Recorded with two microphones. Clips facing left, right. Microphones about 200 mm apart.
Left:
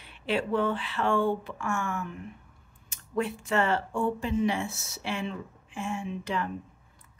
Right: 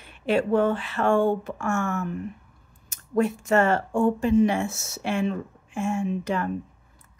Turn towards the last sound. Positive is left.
turn(degrees=-45)  # may be behind; listen again after turning